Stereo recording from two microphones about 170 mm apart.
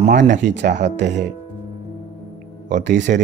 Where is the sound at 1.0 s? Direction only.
90° right.